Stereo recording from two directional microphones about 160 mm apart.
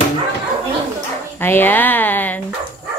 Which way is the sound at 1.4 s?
15° left (ahead or behind).